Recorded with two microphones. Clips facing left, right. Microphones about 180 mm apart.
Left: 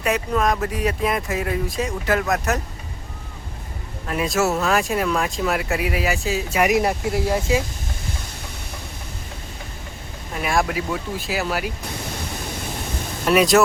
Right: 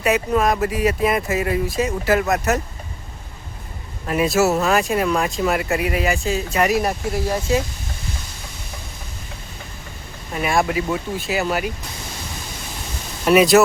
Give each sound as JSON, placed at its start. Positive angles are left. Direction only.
{"t": 0.0, "sound": "speech", "side_deg": -5}
{"t": 4.0, "sound": "speech", "side_deg": -5}
{"t": 6.7, "sound": "speech", "side_deg": 20}
{"t": 10.3, "sound": "speech", "side_deg": 0}
{"t": 13.2, "sound": "speech", "side_deg": -5}